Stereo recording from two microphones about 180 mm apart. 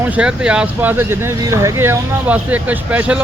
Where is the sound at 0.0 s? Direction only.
5° right (ahead or behind).